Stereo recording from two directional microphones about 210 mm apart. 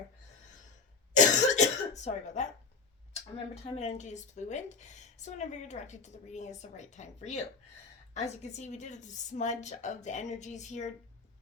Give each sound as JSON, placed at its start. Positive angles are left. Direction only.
{"t": 1.1, "sound": "cough", "side_deg": 35}
{"t": 3.1, "sound": "speech", "side_deg": 30}